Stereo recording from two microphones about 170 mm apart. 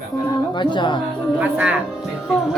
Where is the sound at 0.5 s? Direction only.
25° left (ahead or behind).